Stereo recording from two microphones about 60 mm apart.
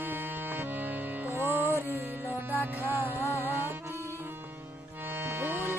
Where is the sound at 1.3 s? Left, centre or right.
Right.